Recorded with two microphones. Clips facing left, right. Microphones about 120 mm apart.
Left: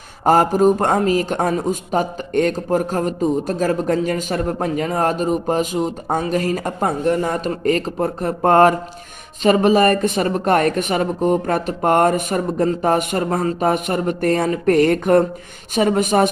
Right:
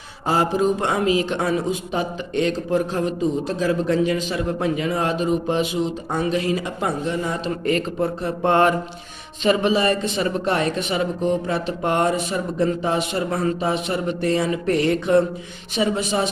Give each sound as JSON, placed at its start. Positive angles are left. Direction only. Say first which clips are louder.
{"t": 0.3, "sound": "a man's voice", "louder": "left 6 dB", "side_deg": 45}